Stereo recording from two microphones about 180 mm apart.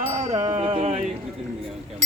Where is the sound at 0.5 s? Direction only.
40° right (ahead or behind).